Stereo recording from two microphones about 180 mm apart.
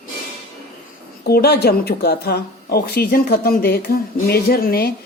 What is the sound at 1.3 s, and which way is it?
Speech, 60° left (ahead or behind).